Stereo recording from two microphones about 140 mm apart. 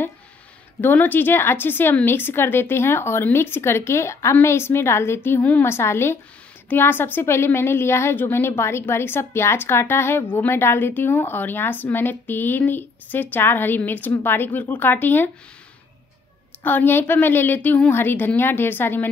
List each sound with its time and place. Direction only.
0.7 s a woman's voice: 15° left (ahead or behind)
16.6 s a woman's voice: 15° left (ahead or behind)